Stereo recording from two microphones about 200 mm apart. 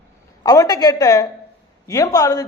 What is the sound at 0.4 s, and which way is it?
Speech, 15° left (ahead or behind).